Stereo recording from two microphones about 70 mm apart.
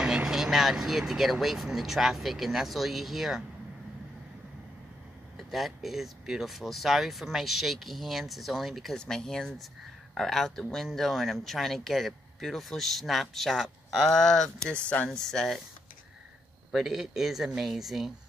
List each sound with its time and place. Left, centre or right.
0.0 s speech: centre
5.5 s speech: centre
16.7 s speech: centre